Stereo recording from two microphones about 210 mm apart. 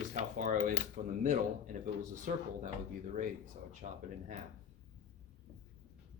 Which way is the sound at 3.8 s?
35° right (ahead or behind).